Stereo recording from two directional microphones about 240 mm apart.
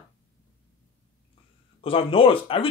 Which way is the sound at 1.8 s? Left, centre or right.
Left.